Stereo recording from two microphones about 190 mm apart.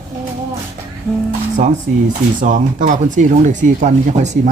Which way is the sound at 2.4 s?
40° right (ahead or behind).